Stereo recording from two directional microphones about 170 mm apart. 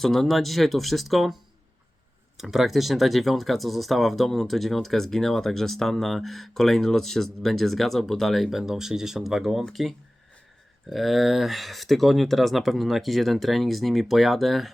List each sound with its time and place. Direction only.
0.0 s speech: centre (ahead or behind)
2.4 s speech: centre (ahead or behind)